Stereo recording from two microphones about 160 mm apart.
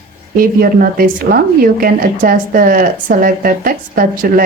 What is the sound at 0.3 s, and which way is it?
Speech, 65° right (ahead or behind).